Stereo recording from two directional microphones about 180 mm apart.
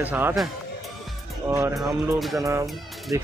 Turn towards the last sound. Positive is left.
turn(degrees=0)  # may be behind; listen again after turning